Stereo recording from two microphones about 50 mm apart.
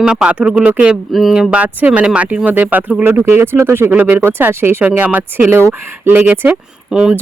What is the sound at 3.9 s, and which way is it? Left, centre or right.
Speech, right.